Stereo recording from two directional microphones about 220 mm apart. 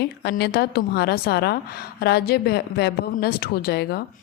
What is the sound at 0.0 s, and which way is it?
A woman's voice, 45° left (ahead or behind).